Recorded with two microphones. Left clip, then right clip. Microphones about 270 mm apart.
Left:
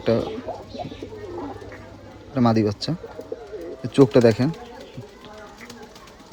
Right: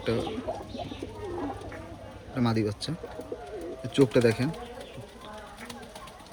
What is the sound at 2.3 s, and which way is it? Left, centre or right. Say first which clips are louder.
Speech: left 8 dB; left.